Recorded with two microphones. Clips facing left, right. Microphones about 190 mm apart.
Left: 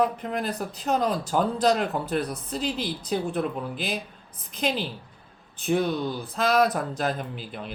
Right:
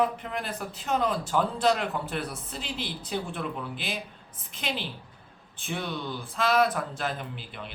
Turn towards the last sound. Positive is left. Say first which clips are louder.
# left 4 dB
turn(degrees=40)  # may be behind; listen again after turning